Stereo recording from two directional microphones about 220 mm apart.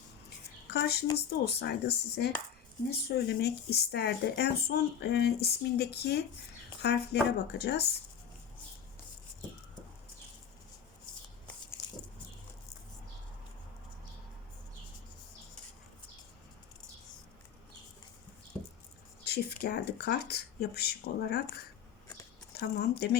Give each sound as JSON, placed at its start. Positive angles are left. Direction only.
{"t": 0.7, "sound": "speech", "side_deg": 45}
{"t": 19.2, "sound": "speech", "side_deg": 45}
{"t": 22.5, "sound": "speech", "side_deg": 45}